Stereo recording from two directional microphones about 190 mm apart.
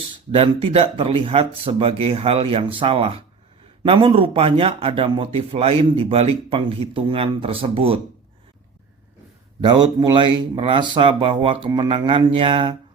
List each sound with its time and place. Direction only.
0.3 s a man's voice: 30° right (ahead or behind)
9.6 s a man's voice: 25° right (ahead or behind)